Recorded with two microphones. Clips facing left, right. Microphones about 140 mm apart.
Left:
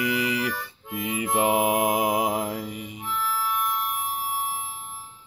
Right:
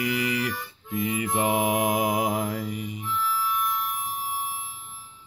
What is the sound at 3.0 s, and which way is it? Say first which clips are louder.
Music: left 1 dB; 75° left (ahead or behind).